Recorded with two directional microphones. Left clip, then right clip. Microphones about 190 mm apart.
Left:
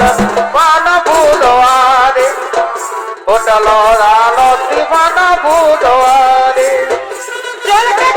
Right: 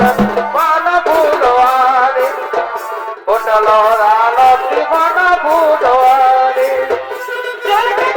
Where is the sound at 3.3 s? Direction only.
35° left (ahead or behind).